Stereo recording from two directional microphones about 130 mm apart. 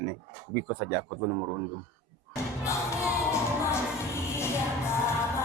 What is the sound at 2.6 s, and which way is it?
Music, 20° left (ahead or behind).